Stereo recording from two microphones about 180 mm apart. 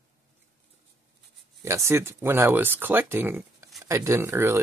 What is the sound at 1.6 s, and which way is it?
Speech, 15° right (ahead or behind).